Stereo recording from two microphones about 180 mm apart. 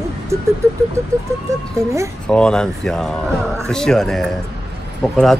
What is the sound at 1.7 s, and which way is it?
Speech, 15° right (ahead or behind).